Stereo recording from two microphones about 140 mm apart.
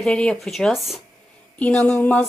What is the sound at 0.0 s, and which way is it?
Speech, 5° left (ahead or behind).